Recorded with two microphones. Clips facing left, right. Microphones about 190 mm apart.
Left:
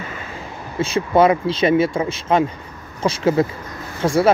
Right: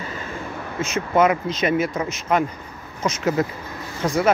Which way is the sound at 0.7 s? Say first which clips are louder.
Left 4 dB; 30° left (ahead or behind).